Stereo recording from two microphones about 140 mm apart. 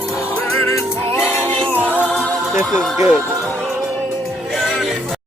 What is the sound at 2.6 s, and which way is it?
Speech, 15° right (ahead or behind).